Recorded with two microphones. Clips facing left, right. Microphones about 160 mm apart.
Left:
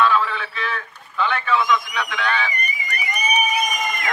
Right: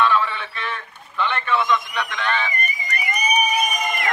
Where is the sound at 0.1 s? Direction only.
5° left (ahead or behind).